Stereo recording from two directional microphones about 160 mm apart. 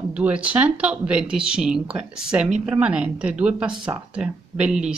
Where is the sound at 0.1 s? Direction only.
10° right (ahead or behind).